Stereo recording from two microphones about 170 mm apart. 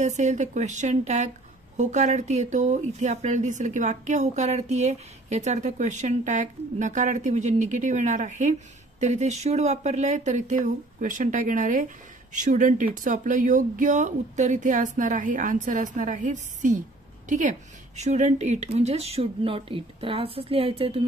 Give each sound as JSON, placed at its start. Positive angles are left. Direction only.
{"t": 0.0, "sound": "a woman's voice", "side_deg": -45}